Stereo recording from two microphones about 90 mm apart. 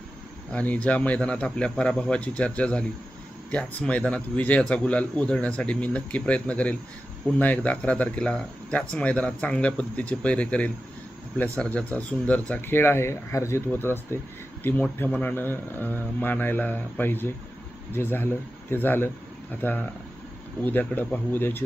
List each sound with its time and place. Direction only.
0.5 s speech: 15° left (ahead or behind)